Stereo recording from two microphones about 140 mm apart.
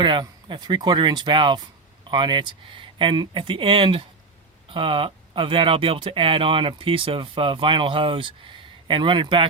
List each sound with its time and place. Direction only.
0.0 s speech: 35° right (ahead or behind)